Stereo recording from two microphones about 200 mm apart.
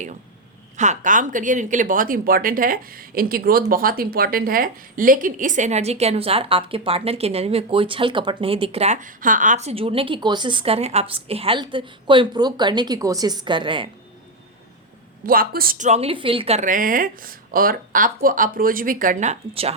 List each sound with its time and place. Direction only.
0.8 s speech: 40° right (ahead or behind)
15.3 s a woman's voice: 45° right (ahead or behind)